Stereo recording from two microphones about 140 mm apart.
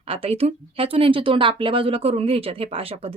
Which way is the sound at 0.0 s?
45° right (ahead or behind).